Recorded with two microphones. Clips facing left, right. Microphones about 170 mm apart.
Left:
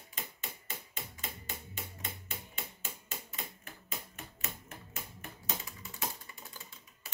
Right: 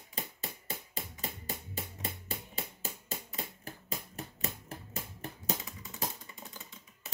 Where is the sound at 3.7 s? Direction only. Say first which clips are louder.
Right 4 dB; 35° right (ahead or behind).